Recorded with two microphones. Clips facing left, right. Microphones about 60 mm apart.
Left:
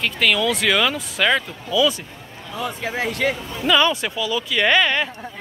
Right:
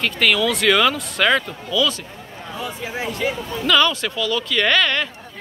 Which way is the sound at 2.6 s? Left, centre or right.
Left.